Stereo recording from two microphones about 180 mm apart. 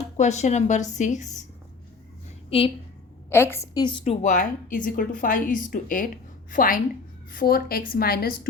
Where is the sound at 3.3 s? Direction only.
15° left (ahead or behind).